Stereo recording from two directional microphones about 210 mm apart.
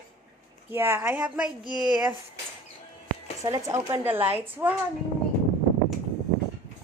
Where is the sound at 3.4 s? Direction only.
15° right (ahead or behind).